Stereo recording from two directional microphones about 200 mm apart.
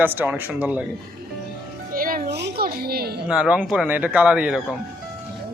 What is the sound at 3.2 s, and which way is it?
Speech, 5° right (ahead or behind).